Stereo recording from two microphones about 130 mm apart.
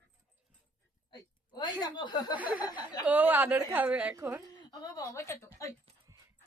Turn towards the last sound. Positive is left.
turn(degrees=20)  # may be behind; listen again after turning